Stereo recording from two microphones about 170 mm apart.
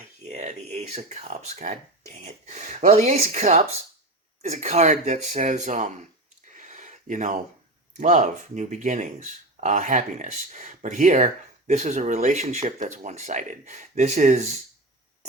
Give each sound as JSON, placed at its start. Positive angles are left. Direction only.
{"t": 0.2, "sound": "speech", "side_deg": -40}
{"t": 6.5, "sound": "a sound", "side_deg": -45}
{"t": 7.9, "sound": "speech", "side_deg": -45}